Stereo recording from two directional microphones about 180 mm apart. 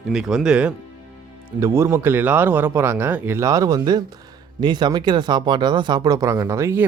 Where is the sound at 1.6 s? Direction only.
15° right (ahead or behind).